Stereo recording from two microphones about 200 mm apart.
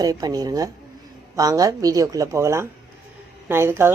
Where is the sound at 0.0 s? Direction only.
20° right (ahead or behind).